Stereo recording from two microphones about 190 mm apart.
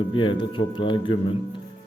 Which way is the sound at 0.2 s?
25° left (ahead or behind).